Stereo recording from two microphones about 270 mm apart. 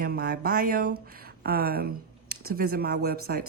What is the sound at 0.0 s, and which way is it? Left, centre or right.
Speech, right.